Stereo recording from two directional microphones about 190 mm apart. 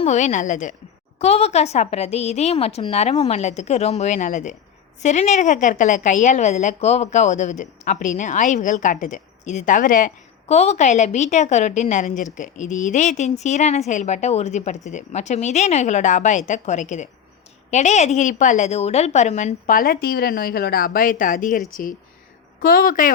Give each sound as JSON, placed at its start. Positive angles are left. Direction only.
{"t": 0.0, "sound": "a woman's voice", "side_deg": 40}
{"t": 10.5, "sound": "a woman's voice", "side_deg": 35}
{"t": 22.6, "sound": "a woman's voice", "side_deg": 50}